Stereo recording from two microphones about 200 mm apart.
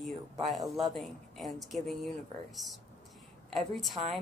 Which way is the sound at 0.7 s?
Centre (ahead or behind).